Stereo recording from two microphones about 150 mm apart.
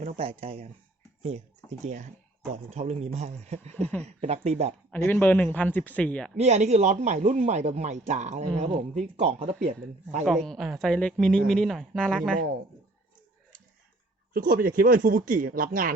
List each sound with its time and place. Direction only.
0.0 s speech: 40° right (ahead or behind)
1.8 s speech: 50° right (ahead or behind)
4.9 s speech: 10° left (ahead or behind)
6.3 s speech: 50° right (ahead or behind)
10.2 s a woman's voice: centre (ahead or behind)
14.3 s speech: 70° right (ahead or behind)